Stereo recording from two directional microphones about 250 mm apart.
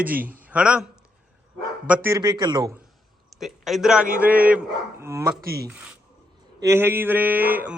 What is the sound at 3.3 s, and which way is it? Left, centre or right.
A man's voice, centre.